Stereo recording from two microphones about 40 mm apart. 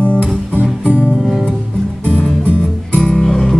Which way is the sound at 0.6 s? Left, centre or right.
Right.